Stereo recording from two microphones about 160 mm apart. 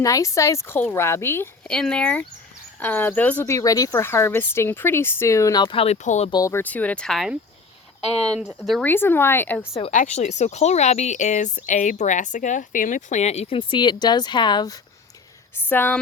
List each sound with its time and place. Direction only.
0.0 s speech: 20° left (ahead or behind); by 6.3 s 45° left (ahead or behind)
6.3 s speech: 20° left (ahead or behind); by 7.3 s centre (ahead or behind)
8.8 s speech: 15° left (ahead or behind)
9.7 s speech: 45° left (ahead or behind); by 14.8 s 25° left (ahead or behind)
15.5 s speech: 15° left (ahead or behind)